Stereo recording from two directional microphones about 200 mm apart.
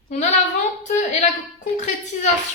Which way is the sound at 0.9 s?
35° left (ahead or behind).